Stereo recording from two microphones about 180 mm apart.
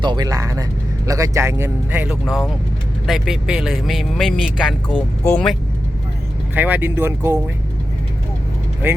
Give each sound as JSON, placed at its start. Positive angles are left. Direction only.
{"t": 0.0, "sound": "a man's voice", "side_deg": -25}
{"t": 6.5, "sound": "speech", "side_deg": -10}
{"t": 8.8, "sound": "speech", "side_deg": -10}